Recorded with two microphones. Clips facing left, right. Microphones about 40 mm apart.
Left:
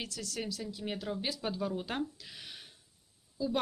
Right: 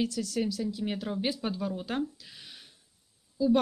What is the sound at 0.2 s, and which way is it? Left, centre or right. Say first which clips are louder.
Speech: right 9 dB; centre.